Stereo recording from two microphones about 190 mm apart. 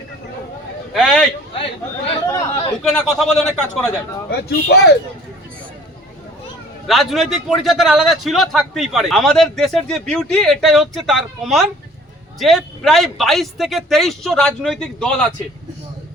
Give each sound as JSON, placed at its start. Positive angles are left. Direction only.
{"t": 0.9, "sound": "speech", "side_deg": 0}
{"t": 1.5, "sound": "chatter", "side_deg": 30}
{"t": 2.8, "sound": "a man's voice", "side_deg": 0}
{"t": 4.3, "sound": "speech", "side_deg": 55}
{"t": 6.8, "sound": "a man's voice", "side_deg": 0}